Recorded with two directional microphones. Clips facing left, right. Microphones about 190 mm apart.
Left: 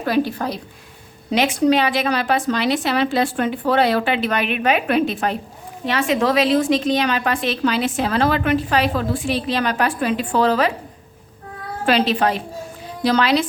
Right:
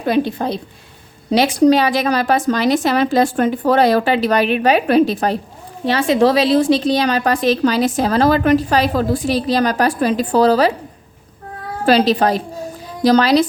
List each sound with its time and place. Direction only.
0.0 s a woman's voice: 20° right (ahead or behind)
1.3 s a woman's voice: 35° right (ahead or behind)
11.9 s a woman's voice: 35° right (ahead or behind)